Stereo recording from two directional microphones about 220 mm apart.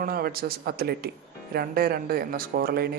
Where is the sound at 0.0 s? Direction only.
40° right (ahead or behind).